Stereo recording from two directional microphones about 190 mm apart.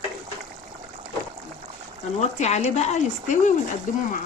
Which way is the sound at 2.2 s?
35° left (ahead or behind).